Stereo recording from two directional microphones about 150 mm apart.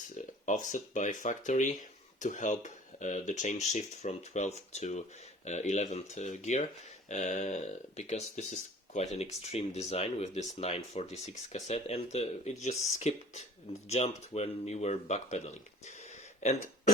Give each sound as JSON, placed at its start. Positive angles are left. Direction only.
{"t": 0.4, "sound": "speech", "side_deg": 55}